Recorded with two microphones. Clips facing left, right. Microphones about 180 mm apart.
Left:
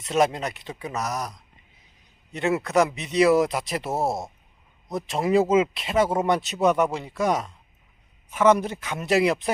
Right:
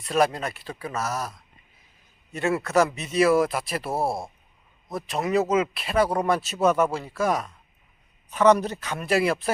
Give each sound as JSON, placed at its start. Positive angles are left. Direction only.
{"t": 0.0, "sound": "speech", "side_deg": 20}
{"t": 8.3, "sound": "speech", "side_deg": 10}